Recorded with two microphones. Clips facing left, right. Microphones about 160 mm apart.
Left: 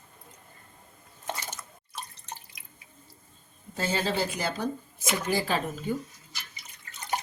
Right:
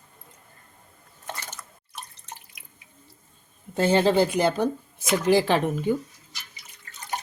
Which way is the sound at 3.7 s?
60° right (ahead or behind).